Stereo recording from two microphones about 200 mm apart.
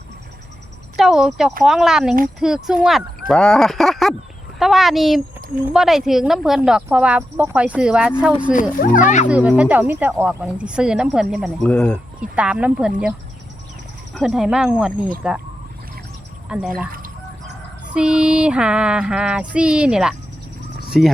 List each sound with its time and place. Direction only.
0.9 s speech: centre (ahead or behind)
8.7 s speech: 45° left (ahead or behind)
9.3 s speech: 5° right (ahead or behind)
12.4 s speech: 5° right (ahead or behind)
14.1 s speech: centre (ahead or behind)
16.5 s speech: 5° right (ahead or behind)
17.9 s speech: 5° right (ahead or behind)